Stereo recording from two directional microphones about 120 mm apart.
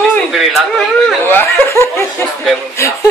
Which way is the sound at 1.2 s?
20° left (ahead or behind).